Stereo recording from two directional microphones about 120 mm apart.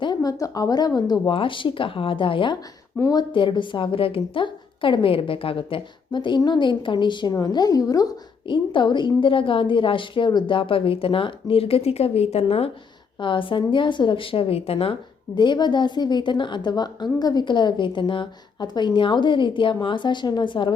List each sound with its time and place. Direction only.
0.0 s a woman's voice: 35° left (ahead or behind); by 12.7 s 55° left (ahead or behind)
13.1 s a woman's voice: 45° left (ahead or behind)
15.4 s a woman's voice: 40° left (ahead or behind)